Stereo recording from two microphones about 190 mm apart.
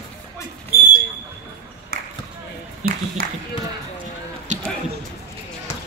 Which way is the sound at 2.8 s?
40° right (ahead or behind).